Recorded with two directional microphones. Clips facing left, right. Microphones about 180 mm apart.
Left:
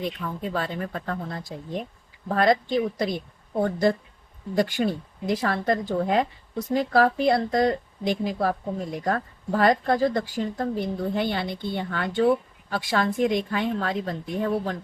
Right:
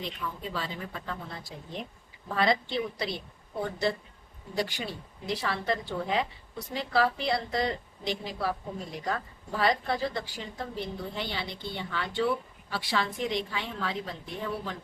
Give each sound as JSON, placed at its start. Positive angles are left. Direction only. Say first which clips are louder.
{"t": 0.0, "sound": "speech", "louder": "left 6 dB", "side_deg": 50}